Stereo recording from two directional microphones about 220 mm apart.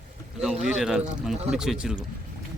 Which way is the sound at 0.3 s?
5° right (ahead or behind).